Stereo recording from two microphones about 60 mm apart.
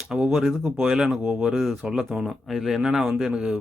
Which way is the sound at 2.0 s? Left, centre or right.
Centre.